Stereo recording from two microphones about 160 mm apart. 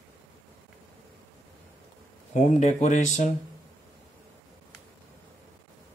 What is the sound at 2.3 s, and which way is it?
Speech, 45° left (ahead or behind).